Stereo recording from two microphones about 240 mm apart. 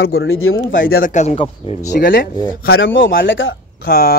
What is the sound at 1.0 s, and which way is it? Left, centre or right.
Speech, left.